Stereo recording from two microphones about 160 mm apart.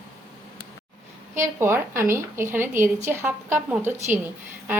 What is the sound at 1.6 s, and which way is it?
A woman's voice, 15° right (ahead or behind).